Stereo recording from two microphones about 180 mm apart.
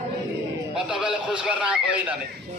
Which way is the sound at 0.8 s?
5° right (ahead or behind).